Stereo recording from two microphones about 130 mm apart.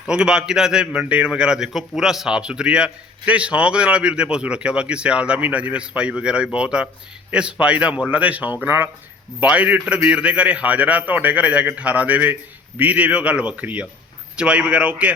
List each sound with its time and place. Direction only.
0.0 s a man's voice: 5° right (ahead or behind)